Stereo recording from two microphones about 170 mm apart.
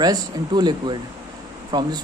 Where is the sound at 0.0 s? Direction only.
25° right (ahead or behind).